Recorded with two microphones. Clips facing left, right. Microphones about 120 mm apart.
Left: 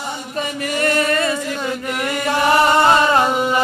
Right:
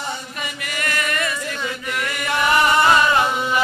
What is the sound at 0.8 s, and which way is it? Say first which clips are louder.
Chant: left 7 dB; 35° left (ahead or behind).